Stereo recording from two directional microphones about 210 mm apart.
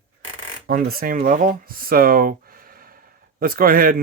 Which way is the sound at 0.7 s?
45° right (ahead or behind).